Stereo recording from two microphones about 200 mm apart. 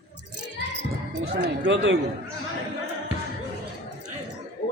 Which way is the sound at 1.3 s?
60° right (ahead or behind).